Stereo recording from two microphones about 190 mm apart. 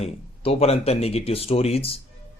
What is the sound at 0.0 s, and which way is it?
Speech, 30° left (ahead or behind).